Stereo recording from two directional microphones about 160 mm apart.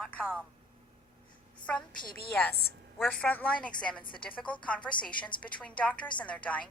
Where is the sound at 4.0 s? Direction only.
30° left (ahead or behind).